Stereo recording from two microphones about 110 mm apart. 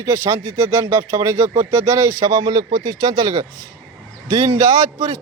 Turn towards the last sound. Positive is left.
turn(degrees=-30)  # may be behind; listen again after turning